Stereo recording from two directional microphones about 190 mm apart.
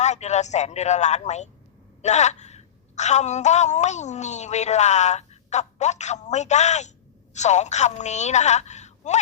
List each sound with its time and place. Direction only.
0.0 s a woman's voice: 35° left (ahead or behind)